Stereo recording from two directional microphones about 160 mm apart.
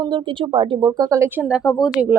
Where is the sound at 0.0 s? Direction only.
30° right (ahead or behind).